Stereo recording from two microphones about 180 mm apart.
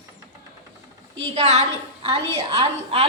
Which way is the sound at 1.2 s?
35° right (ahead or behind).